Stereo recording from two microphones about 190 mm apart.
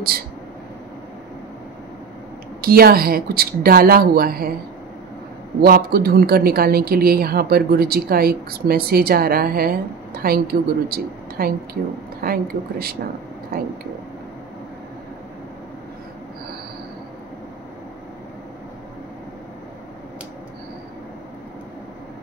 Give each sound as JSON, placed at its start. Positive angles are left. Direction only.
{"t": 2.6, "sound": "speech", "side_deg": -50}
{"t": 5.6, "sound": "speech", "side_deg": -55}